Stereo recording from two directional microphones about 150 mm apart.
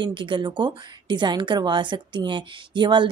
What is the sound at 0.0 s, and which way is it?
A woman's voice, 35° right (ahead or behind).